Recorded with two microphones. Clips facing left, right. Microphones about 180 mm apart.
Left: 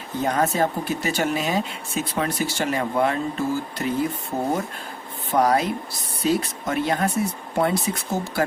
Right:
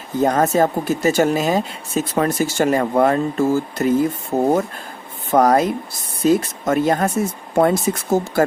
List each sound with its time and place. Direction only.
0.2 s speech: 45° right (ahead or behind)